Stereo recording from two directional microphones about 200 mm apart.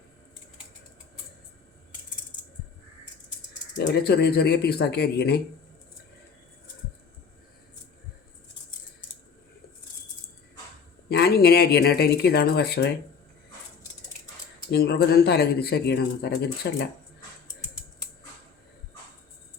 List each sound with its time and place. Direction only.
4.0 s speech: 55° left (ahead or behind)
11.1 s speech: 55° left (ahead or behind)
14.7 s speech: 55° left (ahead or behind)